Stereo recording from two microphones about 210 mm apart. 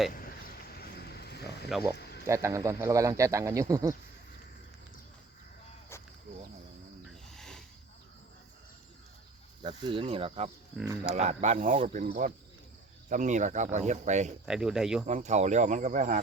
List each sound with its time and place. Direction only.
0.1 s a sound: 45° left (ahead or behind)
1.7 s speech: 10° right (ahead or behind)
2.0 s a sound: 50° left (ahead or behind)
2.2 s speech: 15° right (ahead or behind)
5.9 s a sound: 10° left (ahead or behind)
7.1 s wild animals: centre (ahead or behind)
9.6 s speech: 25° right (ahead or behind)
10.8 s speech: 5° right (ahead or behind)
11.1 s speech: 35° right (ahead or behind)
14.4 s speech: 5° right (ahead or behind)
15.0 s speech: 35° right (ahead or behind)